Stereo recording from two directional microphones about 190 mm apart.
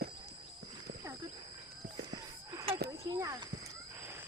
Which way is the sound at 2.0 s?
20° right (ahead or behind).